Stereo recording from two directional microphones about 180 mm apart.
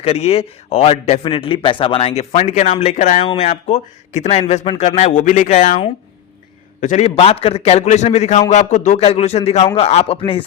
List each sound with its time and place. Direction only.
0.0 s speech: 35° left (ahead or behind)
6.8 s speech: 35° left (ahead or behind)